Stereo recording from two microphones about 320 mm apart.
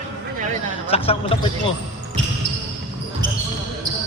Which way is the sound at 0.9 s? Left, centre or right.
Centre.